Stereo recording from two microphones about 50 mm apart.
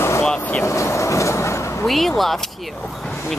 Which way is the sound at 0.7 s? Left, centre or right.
Left.